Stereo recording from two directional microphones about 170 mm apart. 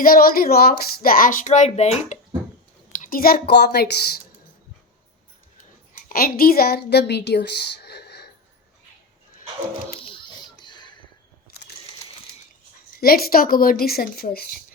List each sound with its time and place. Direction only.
0.0 s speech: 60° left (ahead or behind); by 2.1 s 40° left (ahead or behind)
2.9 s a woman's voice: 55° left (ahead or behind); by 4.1 s 70° left (ahead or behind)
6.1 s a woman's voice: 60° left (ahead or behind); by 8.3 s 75° left (ahead or behind)
10.6 s a sound: 25° left (ahead or behind)
13.0 s speech: 60° left (ahead or behind)